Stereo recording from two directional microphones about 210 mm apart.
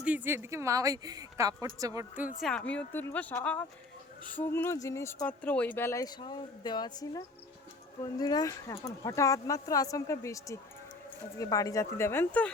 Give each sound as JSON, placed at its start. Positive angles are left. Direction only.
{"t": 0.0, "sound": "a woman's voice", "side_deg": -5}
{"t": 2.5, "sound": "speech", "side_deg": 5}